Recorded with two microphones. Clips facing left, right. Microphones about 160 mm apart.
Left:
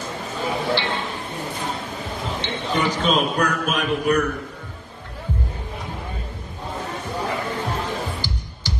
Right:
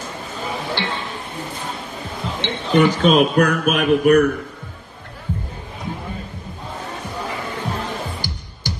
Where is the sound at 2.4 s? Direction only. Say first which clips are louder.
Right 8 dB; 60° right (ahead or behind).